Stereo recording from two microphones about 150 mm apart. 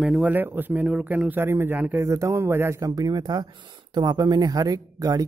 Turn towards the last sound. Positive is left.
turn(degrees=-25)  # may be behind; listen again after turning